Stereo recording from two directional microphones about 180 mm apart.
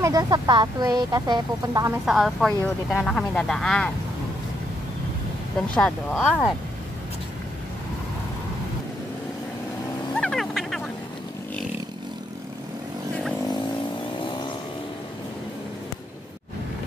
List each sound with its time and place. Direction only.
0.0 s speech: 20° right (ahead or behind)
2.0 s speech: centre (ahead or behind)
5.8 s speech: 5° left (ahead or behind)
10.1 s vehicle: 5° left (ahead or behind)